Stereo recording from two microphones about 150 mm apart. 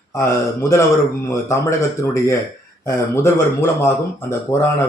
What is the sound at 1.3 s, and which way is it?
A man's voice, 20° left (ahead or behind).